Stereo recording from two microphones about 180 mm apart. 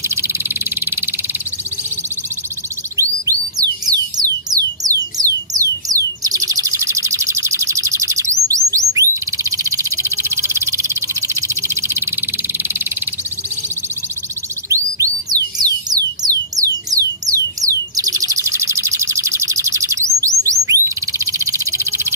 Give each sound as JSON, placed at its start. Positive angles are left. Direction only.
{"t": 0.1, "sound": "frog", "side_deg": -15}
{"t": 3.0, "sound": "music", "side_deg": -20}
{"t": 8.6, "sound": "bird", "side_deg": -20}
{"t": 14.7, "sound": "music", "side_deg": -20}
{"t": 17.3, "sound": "bird", "side_deg": -20}